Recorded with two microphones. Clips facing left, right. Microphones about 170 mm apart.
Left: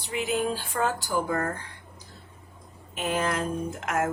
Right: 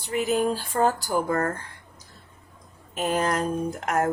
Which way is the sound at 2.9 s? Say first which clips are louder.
Right 3 dB; 40° right (ahead or behind).